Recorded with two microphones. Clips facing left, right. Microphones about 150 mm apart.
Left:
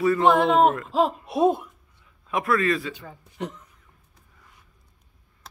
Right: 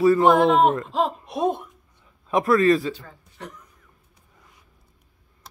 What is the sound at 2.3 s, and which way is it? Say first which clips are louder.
Speech: right 5 dB; 35° right (ahead or behind).